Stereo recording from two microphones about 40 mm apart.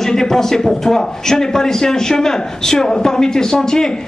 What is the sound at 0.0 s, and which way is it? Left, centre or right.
A man's voice, centre.